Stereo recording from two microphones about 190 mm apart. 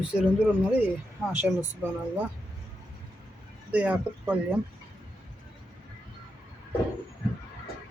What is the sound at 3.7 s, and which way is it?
Speech, 5° right (ahead or behind).